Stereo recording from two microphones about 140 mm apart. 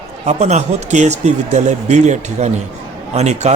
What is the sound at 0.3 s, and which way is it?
Speech, 55° right (ahead or behind).